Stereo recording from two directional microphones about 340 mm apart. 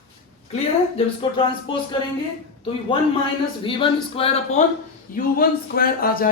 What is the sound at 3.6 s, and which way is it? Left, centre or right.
Speech, centre.